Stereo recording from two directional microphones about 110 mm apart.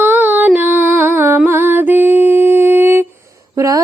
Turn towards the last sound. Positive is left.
turn(degrees=-25)  # may be behind; listen again after turning